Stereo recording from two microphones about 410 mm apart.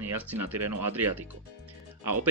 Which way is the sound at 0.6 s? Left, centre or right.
Right.